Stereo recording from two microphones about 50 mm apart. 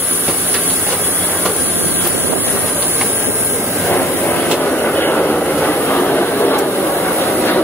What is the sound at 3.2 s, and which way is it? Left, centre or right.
Train, right.